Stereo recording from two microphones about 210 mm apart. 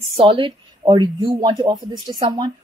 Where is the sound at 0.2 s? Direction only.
25° right (ahead or behind).